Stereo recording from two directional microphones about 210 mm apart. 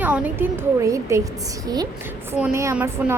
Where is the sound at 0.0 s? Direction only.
10° right (ahead or behind).